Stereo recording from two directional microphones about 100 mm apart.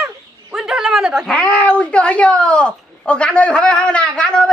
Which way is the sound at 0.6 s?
5° right (ahead or behind).